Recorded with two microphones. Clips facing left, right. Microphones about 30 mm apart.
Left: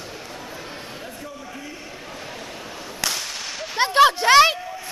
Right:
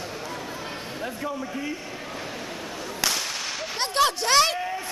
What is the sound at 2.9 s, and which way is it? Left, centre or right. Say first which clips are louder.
Whip: even; centre.